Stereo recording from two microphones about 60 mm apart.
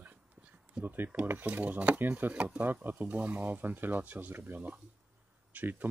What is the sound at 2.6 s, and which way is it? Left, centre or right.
Speech, right.